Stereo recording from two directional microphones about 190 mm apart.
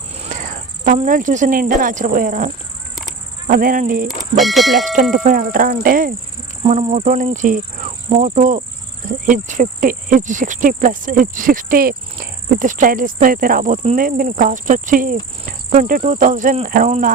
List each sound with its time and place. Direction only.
0.2 s speech: 40° right (ahead or behind)
3.4 s cricket: 45° right (ahead or behind)
4.1 s bell: centre (ahead or behind)
5.1 s cricket: 45° right (ahead or behind)
6.6 s speech: 35° right (ahead or behind)
9.2 s cricket: 45° right (ahead or behind)